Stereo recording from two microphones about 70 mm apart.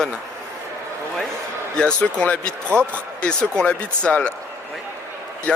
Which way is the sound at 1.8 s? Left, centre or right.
Centre.